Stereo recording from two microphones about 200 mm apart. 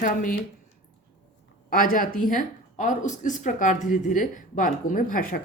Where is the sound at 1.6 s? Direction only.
45° left (ahead or behind).